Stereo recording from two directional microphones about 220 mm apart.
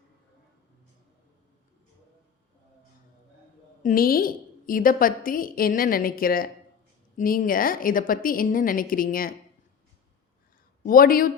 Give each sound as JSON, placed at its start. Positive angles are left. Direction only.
{"t": 3.8, "sound": "a woman's voice", "side_deg": 40}
{"t": 10.8, "sound": "a woman's voice", "side_deg": 40}